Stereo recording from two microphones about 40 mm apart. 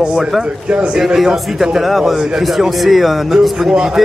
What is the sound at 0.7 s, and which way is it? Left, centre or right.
Speech, right.